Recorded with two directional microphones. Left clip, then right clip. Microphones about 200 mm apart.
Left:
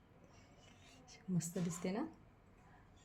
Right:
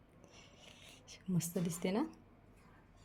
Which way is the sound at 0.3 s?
40° right (ahead or behind).